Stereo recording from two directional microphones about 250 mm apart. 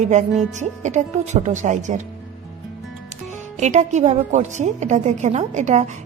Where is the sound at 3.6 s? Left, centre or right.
Right.